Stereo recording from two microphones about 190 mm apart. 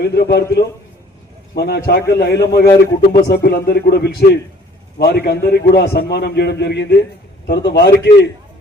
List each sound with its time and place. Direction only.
0.0 s a man's voice: 60° left (ahead or behind)
1.5 s a man's voice: 60° left (ahead or behind)